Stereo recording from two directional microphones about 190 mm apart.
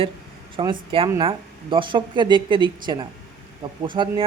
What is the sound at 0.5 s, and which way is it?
Speech, 25° right (ahead or behind).